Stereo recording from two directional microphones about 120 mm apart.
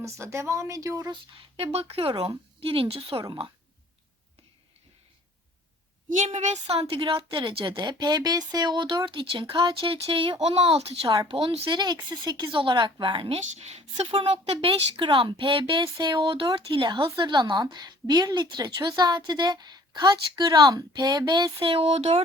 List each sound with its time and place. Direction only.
0.0 s a woman's voice: 25° right (ahead or behind)
1.1 s speech: 55° right (ahead or behind)
6.1 s speech: 80° right
6.7 s speech: 50° right (ahead or behind)
11.0 s a woman's voice: 40° right (ahead or behind); by 14.1 s 60° right (ahead or behind)
14.1 s a woman's voice: 50° right (ahead or behind)